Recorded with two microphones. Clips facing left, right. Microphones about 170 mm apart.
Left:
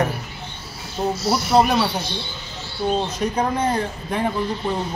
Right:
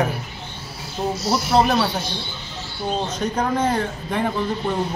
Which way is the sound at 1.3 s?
Centre (ahead or behind).